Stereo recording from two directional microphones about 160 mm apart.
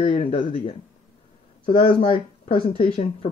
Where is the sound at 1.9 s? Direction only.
35° left (ahead or behind).